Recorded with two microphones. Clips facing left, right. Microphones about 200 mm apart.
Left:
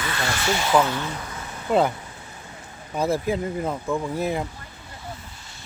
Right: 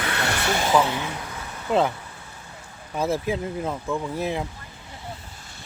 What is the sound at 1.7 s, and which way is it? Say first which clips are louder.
Speech: left 1 dB; centre (ahead or behind).